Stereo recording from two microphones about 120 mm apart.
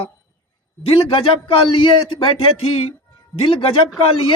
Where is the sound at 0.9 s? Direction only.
50° left (ahead or behind).